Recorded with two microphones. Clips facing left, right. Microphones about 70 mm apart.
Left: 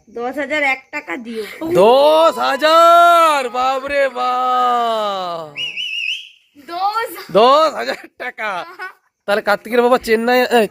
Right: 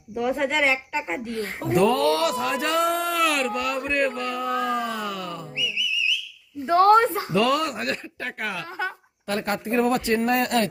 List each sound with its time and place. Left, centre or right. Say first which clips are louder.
0.2 s a woman's voice: left 3 dB; left
1.6 s speech: left 10 dB; left
6.7 s a woman's voice: right 3 dB; right
7.3 s a woman's voice: left 13 dB; left
9.3 s speech: left 10 dB; left